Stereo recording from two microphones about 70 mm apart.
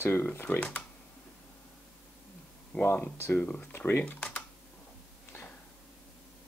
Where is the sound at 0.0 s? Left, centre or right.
Left.